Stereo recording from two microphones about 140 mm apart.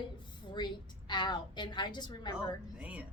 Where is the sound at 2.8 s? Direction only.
10° right (ahead or behind).